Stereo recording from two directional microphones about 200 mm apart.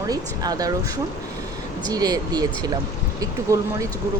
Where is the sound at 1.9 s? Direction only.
20° right (ahead or behind).